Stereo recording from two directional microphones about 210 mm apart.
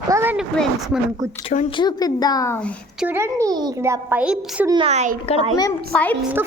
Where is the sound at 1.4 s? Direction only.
25° left (ahead or behind).